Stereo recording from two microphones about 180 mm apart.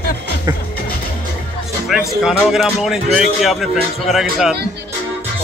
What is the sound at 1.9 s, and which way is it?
A man's voice, centre (ahead or behind).